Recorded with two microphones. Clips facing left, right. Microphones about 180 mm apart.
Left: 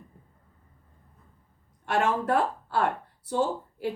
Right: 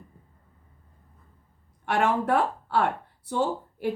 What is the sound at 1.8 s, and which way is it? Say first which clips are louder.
A woman's voice: right 1 dB; 60° right (ahead or behind).